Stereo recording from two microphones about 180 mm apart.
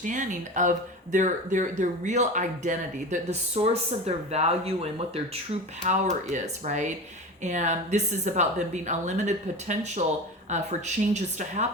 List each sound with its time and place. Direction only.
0.0 s a woman's voice: 45° right (ahead or behind)